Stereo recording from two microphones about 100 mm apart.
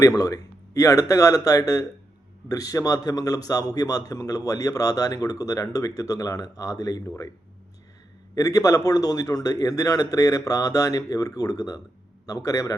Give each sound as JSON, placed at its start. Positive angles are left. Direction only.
{"t": 0.0, "sound": "a man's voice", "side_deg": 35}
{"t": 8.4, "sound": "a man's voice", "side_deg": 35}